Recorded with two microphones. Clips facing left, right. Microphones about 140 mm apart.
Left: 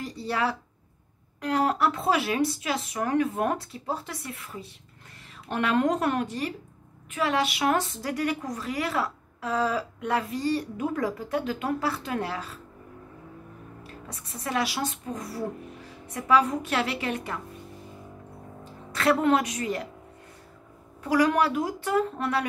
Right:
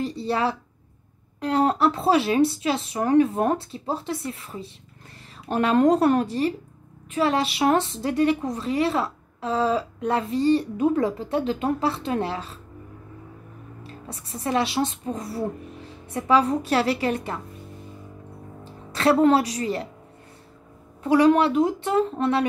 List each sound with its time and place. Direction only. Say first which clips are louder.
0.0 s a sound: right 4 dB; 30° right (ahead or behind)
1.4 s a woman's voice: right 4 dB; 30° right (ahead or behind)
13.8 s a woman's voice: right 6 dB; 30° right (ahead or behind)
18.6 s a woman's voice: right 5 dB; 30° right (ahead or behind)
21.0 s a woman's voice: right 5 dB; 25° right (ahead or behind)